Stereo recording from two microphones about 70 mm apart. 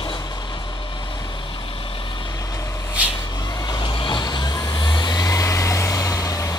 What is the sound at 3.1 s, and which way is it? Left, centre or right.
Vehicle, left.